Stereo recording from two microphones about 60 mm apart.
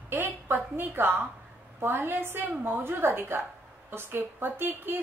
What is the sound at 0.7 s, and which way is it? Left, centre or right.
A woman's voice, right.